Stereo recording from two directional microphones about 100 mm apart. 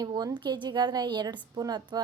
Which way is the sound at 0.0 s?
40° right (ahead or behind).